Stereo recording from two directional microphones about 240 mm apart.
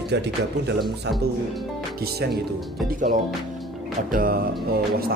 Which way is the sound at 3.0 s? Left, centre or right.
Right.